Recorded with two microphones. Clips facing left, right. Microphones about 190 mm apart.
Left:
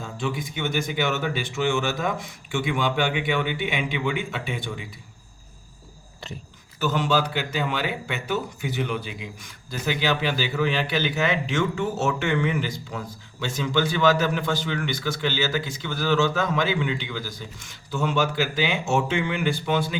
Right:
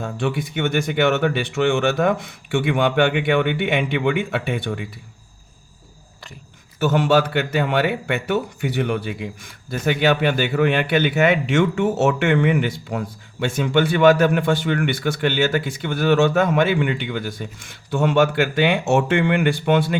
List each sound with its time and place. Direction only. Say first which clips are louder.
0.0 s speech: right 5 dB; 60° right (ahead or behind)
6.7 s speech: right 6 dB; 60° right (ahead or behind)